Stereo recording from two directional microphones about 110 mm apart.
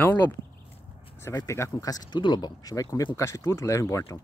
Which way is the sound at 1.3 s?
25° left (ahead or behind).